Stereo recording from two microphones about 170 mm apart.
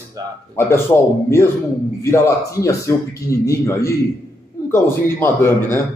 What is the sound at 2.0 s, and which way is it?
A man's voice, 15° left (ahead or behind).